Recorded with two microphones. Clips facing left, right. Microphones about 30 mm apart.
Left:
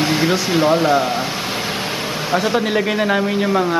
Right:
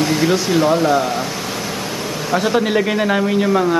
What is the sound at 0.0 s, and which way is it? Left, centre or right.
Speech, centre.